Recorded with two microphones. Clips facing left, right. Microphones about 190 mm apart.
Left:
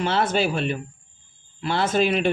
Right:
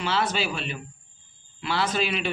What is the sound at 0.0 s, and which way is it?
Speech, 50° left (ahead or behind).